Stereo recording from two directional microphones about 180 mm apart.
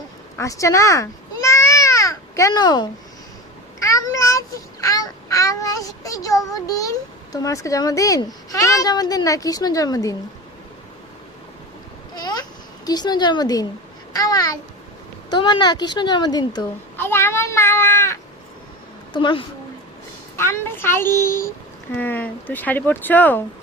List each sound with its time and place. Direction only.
0.3 s babbling: 15° left (ahead or behind)
3.8 s a child's voice: 20° left (ahead or behind)
12.1 s a sound: 20° left (ahead or behind)
14.1 s speech: 20° left (ahead or behind)
17.0 s speech: 15° left (ahead or behind)
19.1 s speech: 30° left (ahead or behind)
20.3 s speech: 15° left (ahead or behind)